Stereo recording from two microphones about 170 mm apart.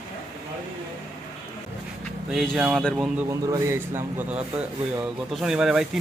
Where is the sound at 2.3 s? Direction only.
Centre (ahead or behind).